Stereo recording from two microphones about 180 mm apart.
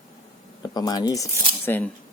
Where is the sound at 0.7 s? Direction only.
20° left (ahead or behind).